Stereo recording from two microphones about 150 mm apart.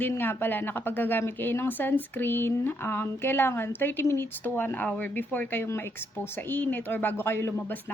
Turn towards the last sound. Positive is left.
turn(degrees=15)  # may be behind; listen again after turning